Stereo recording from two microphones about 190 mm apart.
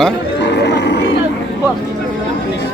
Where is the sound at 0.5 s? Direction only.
65° left (ahead or behind).